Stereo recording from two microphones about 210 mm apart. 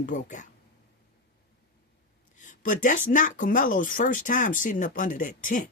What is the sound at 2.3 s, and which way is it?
Speech, 40° left (ahead or behind).